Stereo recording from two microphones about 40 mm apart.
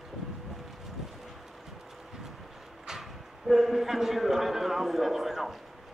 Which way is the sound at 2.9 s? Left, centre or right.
Centre.